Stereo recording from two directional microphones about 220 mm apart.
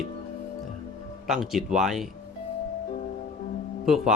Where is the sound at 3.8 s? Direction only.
Centre (ahead or behind).